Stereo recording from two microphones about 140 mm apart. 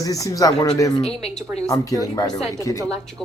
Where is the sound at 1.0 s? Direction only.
5° left (ahead or behind).